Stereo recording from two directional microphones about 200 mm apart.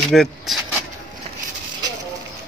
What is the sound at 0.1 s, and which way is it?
Speech, centre (ahead or behind).